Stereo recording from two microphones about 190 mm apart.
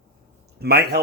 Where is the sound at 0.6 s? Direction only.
60° right (ahead or behind).